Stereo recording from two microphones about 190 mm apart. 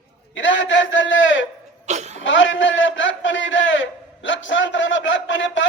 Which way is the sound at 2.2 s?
80° left.